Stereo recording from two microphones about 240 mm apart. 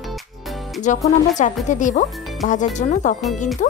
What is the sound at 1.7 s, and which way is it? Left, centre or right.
Speech, left.